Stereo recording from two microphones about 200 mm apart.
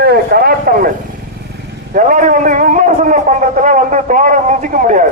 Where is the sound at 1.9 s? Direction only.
40° right (ahead or behind).